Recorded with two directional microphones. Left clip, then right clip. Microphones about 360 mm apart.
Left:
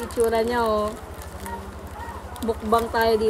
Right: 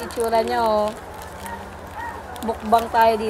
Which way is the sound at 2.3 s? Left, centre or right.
Centre.